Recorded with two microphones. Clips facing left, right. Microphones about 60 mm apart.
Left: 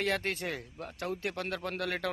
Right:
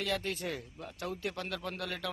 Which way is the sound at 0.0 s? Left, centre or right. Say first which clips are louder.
Left 3 dB; left.